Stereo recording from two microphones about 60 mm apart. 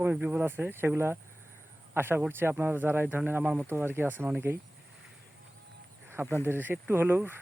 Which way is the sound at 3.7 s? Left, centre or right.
Right.